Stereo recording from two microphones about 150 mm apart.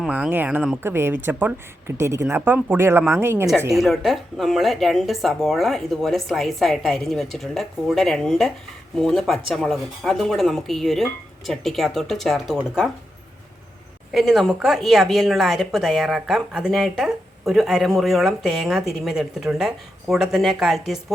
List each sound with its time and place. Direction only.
0.0 s speech: 10° right (ahead or behind)
3.8 s speech: centre (ahead or behind)
14.1 s speech: centre (ahead or behind)